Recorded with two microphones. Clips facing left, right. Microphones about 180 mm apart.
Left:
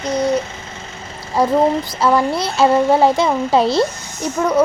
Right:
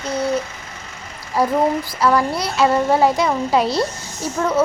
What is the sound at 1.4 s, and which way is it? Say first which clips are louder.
Speech: left 3 dB; 20° left (ahead or behind).